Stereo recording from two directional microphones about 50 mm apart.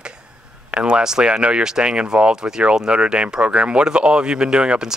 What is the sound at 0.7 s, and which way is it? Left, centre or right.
Speech, right.